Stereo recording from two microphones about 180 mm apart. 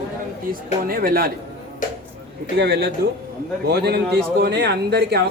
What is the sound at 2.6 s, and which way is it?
A man's voice, 65° right (ahead or behind).